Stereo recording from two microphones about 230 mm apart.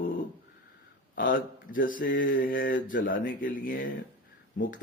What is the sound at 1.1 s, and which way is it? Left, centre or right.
Speech, left.